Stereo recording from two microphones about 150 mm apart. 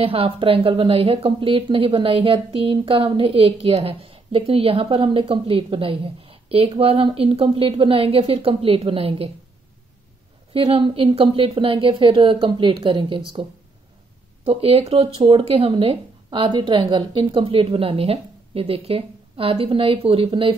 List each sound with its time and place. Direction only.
0.0 s speech: 40° right (ahead or behind)
10.5 s speech: 35° right (ahead or behind)
14.4 s speech: 40° right (ahead or behind)